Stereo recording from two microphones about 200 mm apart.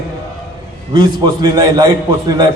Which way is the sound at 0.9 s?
20° right (ahead or behind).